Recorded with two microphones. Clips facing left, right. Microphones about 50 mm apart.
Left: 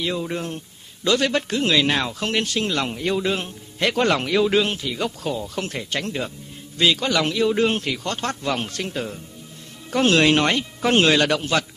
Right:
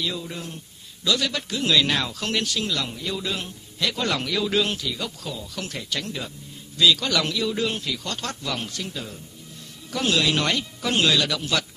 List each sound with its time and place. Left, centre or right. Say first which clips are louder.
0.0 s speech: left 5 dB; left